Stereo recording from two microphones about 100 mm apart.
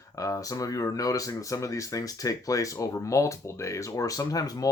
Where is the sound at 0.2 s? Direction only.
35° left (ahead or behind).